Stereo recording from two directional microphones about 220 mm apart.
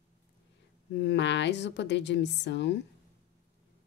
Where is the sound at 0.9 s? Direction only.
55° left (ahead or behind).